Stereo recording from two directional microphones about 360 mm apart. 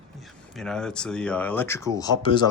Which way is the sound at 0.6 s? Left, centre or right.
Centre.